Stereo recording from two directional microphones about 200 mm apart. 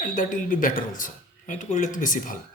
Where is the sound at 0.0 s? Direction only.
40° left (ahead or behind).